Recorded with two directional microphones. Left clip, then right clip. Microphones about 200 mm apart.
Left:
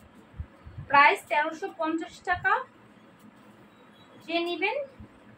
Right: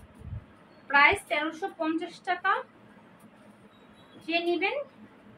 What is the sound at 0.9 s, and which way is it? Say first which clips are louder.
A woman's voice: left 2 dB; 10° right (ahead or behind).